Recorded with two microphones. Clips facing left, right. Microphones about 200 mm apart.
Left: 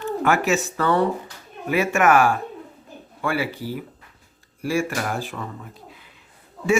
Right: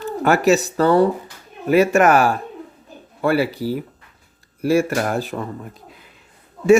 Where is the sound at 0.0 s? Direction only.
35° right (ahead or behind).